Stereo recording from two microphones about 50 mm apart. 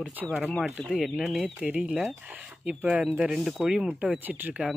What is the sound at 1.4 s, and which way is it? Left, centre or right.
Speech, right.